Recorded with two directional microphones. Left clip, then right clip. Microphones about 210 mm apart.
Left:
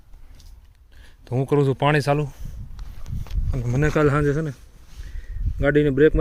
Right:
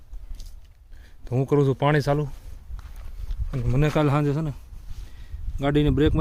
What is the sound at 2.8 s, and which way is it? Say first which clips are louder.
Walk: right 3 dB; 30° left (ahead or behind).